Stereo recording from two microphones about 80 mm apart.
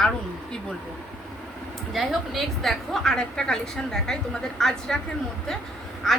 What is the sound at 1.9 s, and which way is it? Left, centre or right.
A woman's voice, centre.